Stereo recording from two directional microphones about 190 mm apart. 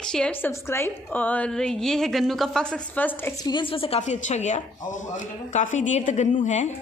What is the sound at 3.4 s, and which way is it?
A woman's voice, 25° left (ahead or behind).